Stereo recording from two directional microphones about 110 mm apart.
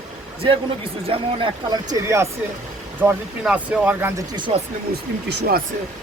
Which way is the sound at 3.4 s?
10° right (ahead or behind).